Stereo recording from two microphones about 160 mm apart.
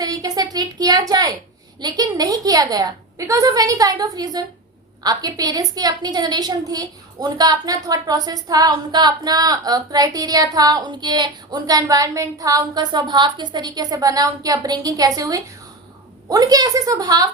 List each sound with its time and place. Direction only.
0.0 s a woman's voice: 20° right (ahead or behind)